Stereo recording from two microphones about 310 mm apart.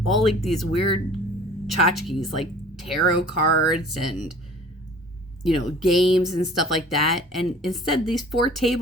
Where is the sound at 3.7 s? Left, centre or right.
Left.